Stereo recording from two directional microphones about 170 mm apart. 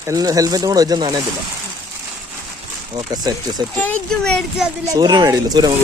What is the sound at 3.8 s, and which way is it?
Speech, 5° left (ahead or behind).